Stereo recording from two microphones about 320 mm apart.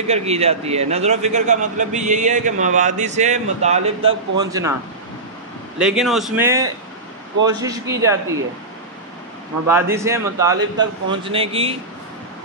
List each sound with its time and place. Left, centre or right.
0.1 s a man's voice: centre
5.8 s speech: centre
9.7 s speech: centre